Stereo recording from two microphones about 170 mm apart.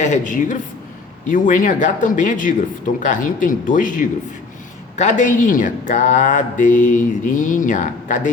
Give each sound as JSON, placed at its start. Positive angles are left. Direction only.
{"t": 0.0, "sound": "speech", "side_deg": 45}